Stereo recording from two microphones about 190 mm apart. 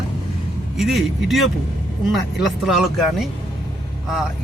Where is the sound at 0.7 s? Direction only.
Centre (ahead or behind).